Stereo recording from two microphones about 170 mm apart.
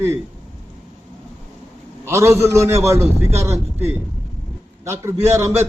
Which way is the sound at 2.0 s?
15° right (ahead or behind).